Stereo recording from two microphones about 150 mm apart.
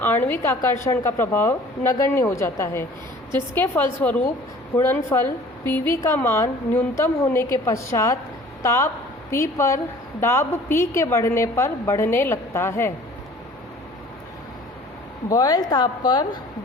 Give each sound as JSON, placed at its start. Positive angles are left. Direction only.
{"t": 0.0, "sound": "a woman's voice", "side_deg": 15}
{"t": 15.3, "sound": "a woman's voice", "side_deg": 25}